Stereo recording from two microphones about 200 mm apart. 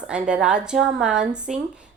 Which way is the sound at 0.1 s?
5° right (ahead or behind).